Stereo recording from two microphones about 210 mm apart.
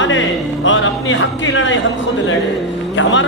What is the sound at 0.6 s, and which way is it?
Music, 65° left (ahead or behind).